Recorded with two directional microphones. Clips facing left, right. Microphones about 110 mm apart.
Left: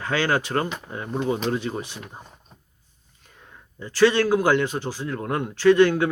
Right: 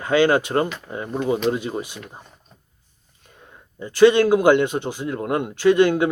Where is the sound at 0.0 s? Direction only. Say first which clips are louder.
Right 6 dB; 15° right (ahead or behind).